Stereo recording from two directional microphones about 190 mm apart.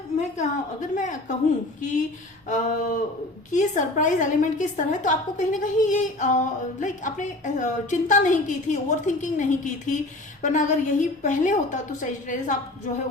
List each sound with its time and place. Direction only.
0.2 s a woman's voice: 40° left (ahead or behind)